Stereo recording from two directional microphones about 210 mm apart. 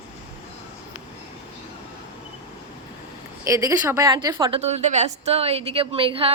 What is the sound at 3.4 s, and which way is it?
A woman's voice, 15° right (ahead or behind).